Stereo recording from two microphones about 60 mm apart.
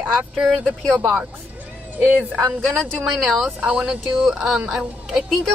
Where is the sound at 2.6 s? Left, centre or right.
Centre.